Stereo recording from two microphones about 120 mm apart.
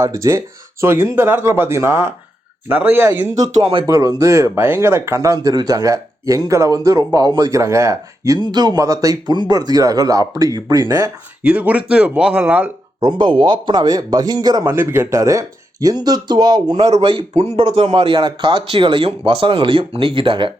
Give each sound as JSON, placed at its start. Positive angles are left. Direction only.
{"t": 0.0, "sound": "speech", "side_deg": -25}
{"t": 3.6, "sound": "speech", "side_deg": -45}
{"t": 3.8, "sound": "speech", "side_deg": -30}
{"t": 11.4, "sound": "speech", "side_deg": -10}
{"t": 13.0, "sound": "speech", "side_deg": -40}
{"t": 17.0, "sound": "speech", "side_deg": -45}